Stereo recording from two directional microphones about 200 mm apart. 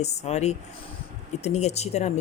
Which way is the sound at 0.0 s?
35° left (ahead or behind).